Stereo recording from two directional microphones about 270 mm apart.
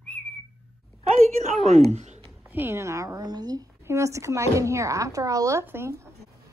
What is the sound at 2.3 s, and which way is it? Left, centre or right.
A woman's voice, centre.